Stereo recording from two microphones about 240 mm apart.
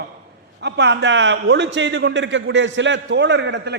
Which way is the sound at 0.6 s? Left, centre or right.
Right.